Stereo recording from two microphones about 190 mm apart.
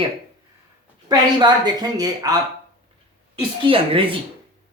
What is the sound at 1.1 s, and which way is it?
Speech, 20° right (ahead or behind).